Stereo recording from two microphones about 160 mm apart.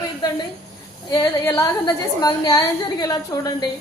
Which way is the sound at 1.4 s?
15° left (ahead or behind).